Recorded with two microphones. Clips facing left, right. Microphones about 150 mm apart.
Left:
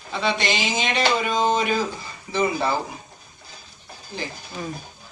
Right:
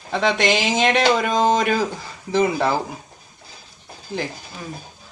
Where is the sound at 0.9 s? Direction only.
55° right (ahead or behind).